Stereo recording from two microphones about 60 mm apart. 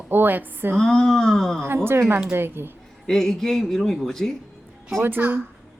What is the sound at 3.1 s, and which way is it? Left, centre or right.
Speech, centre.